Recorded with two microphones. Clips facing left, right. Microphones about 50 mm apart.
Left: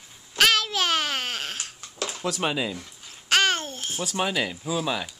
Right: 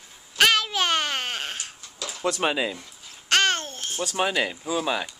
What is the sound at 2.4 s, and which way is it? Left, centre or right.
Speech, centre.